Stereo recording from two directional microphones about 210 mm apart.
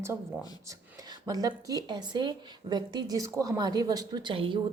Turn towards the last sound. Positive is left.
turn(degrees=-25)  # may be behind; listen again after turning